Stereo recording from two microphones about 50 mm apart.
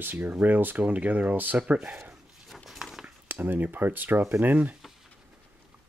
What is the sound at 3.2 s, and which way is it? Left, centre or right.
Speech, right.